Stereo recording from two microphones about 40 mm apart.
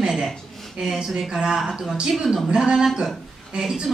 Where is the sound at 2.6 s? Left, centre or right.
Centre.